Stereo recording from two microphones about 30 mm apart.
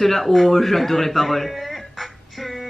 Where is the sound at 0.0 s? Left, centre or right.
Centre.